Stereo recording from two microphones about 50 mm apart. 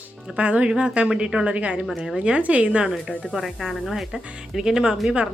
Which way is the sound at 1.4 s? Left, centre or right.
Right.